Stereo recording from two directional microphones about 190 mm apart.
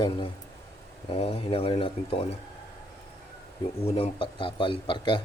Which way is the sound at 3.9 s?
30° left (ahead or behind).